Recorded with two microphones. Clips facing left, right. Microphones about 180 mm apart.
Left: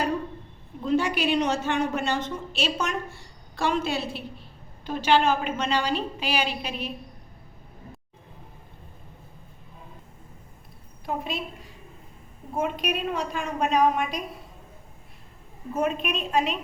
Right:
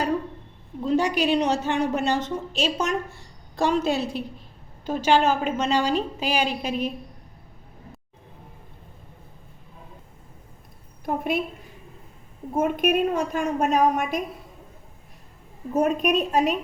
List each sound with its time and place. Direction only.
0.9 s a woman's voice: 40° right (ahead or behind)
11.0 s a woman's voice: 50° right (ahead or behind)
12.5 s a woman's voice: 50° right (ahead or behind)
15.7 s a woman's voice: 40° right (ahead or behind)